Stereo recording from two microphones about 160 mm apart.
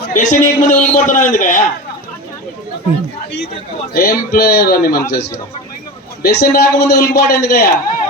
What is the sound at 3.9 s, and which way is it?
A man's voice, 65° left (ahead or behind).